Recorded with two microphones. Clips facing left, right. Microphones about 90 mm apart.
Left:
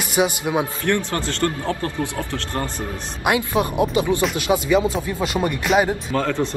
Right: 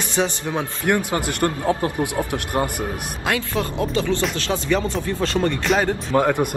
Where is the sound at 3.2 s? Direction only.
20° left (ahead or behind).